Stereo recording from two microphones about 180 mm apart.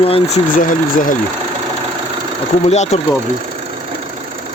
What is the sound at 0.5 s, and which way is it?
Speech, 50° left (ahead or behind).